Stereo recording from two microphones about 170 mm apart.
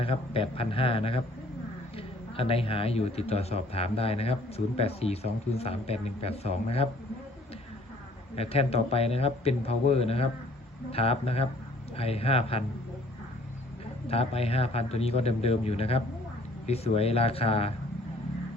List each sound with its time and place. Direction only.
0.0 s a man's voice: 35° left (ahead or behind)
8.4 s a man's voice: 35° left (ahead or behind)
14.1 s a man's voice: 35° left (ahead or behind)